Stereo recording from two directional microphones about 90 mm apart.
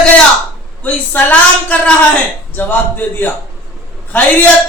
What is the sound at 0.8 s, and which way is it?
A woman's voice, 20° left (ahead or behind).